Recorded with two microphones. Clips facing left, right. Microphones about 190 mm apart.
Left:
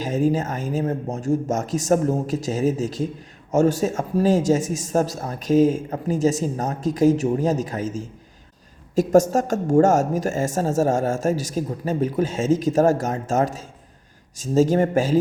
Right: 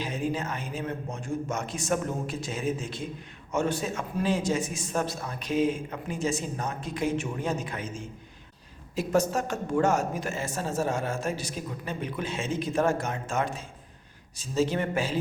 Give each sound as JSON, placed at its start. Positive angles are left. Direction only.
{"t": 0.0, "sound": "speech", "side_deg": 45}